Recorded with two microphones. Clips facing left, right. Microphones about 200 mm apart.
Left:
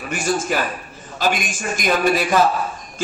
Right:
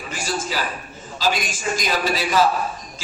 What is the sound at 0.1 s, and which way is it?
A man's voice, 55° left (ahead or behind).